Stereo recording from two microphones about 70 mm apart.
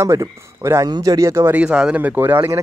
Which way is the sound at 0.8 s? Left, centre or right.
Right.